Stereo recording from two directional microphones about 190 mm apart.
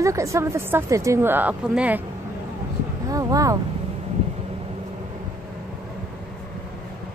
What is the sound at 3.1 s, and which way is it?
Speech, 20° right (ahead or behind).